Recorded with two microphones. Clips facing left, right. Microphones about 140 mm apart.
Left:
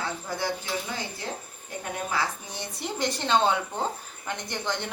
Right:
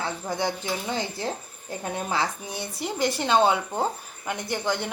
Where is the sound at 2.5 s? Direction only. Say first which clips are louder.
Right 3 dB; 5° right (ahead or behind).